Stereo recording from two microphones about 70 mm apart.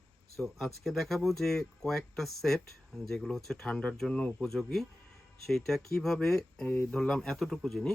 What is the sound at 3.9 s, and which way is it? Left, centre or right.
Speech, centre.